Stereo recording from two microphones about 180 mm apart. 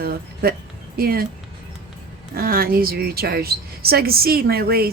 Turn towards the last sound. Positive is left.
turn(degrees=-60)  # may be behind; listen again after turning